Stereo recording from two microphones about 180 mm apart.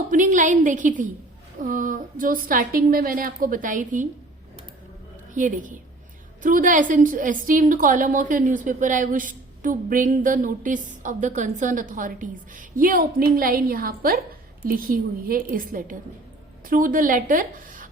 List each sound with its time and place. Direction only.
0.1 s a woman's voice: 45° right (ahead or behind)
5.3 s a woman's voice: 45° right (ahead or behind)